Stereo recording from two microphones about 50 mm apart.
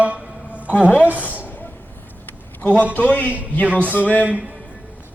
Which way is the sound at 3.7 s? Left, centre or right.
Right.